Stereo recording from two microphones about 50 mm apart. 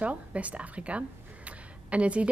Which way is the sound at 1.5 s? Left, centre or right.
Right.